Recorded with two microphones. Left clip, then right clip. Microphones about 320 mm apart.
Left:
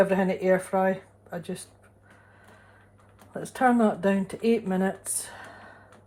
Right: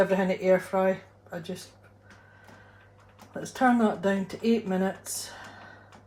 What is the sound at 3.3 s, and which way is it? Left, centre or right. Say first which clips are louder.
Speech: left 1 dB; left.